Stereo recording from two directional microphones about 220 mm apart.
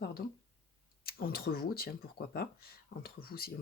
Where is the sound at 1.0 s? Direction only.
45° left (ahead or behind).